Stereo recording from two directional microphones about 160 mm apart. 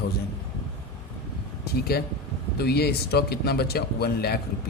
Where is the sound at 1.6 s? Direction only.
75° left (ahead or behind).